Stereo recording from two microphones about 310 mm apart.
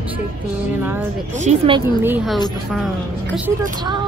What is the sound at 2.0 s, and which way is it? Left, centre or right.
Speech, centre.